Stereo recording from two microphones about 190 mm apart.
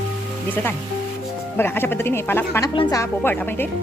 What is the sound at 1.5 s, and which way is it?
Speech, 10° left (ahead or behind).